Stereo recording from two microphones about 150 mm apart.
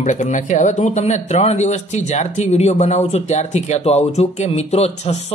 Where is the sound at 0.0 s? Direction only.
55° left (ahead or behind).